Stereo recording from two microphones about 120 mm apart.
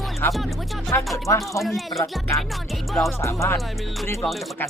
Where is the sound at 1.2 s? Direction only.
25° left (ahead or behind).